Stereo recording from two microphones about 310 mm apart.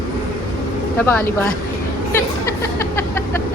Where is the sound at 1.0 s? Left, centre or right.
Centre.